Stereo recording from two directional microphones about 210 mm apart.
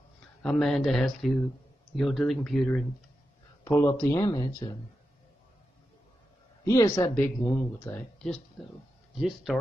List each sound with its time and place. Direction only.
0.4 s speech: 5° left (ahead or behind)
3.6 s speech: 15° left (ahead or behind)
6.6 s speech: 15° left (ahead or behind); by 9.6 s centre (ahead or behind)